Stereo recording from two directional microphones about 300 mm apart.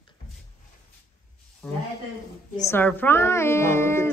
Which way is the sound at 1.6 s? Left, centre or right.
Centre.